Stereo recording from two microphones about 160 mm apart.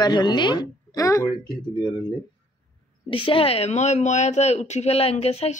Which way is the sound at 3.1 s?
35° left (ahead or behind).